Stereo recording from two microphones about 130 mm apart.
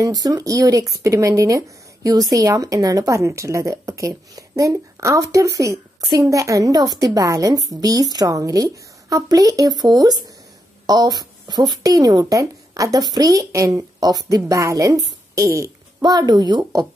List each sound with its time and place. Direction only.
0.0 s a woman's voice: 30° right (ahead or behind)